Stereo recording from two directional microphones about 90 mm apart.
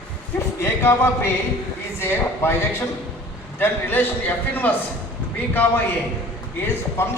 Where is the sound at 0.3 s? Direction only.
30° left (ahead or behind).